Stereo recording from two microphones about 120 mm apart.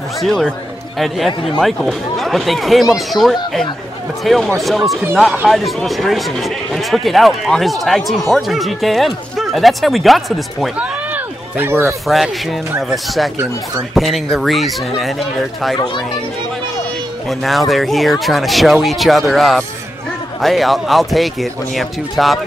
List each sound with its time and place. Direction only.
0.2 s speech: centre (ahead or behind)
11.5 s speech: 20° right (ahead or behind)
12.9 s speech: centre (ahead or behind)
17.3 s speech: centre (ahead or behind)